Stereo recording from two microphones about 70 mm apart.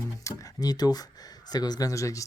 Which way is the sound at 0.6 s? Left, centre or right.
Left.